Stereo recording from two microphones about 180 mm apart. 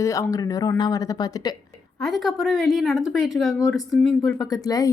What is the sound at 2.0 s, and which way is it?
Speech, centre (ahead or behind).